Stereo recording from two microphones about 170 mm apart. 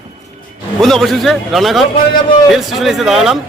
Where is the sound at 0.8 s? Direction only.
Centre (ahead or behind).